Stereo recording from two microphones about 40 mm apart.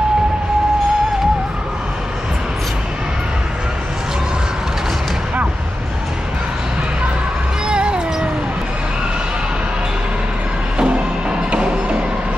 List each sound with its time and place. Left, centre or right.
7.6 s music: right
10.8 s music: right